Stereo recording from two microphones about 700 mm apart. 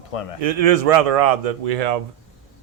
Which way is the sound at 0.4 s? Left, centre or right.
Right.